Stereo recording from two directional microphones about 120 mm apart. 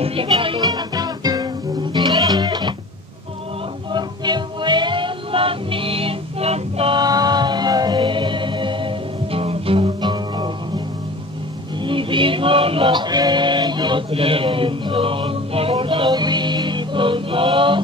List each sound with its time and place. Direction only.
0.0 s music: 50° right (ahead or behind)
0.6 s music: 35° right (ahead or behind)
3.9 s music: 40° right (ahead or behind); by 7.0 s 55° right (ahead or behind)
7.0 s music: 35° right (ahead or behind)
11.8 s music: 45° right (ahead or behind)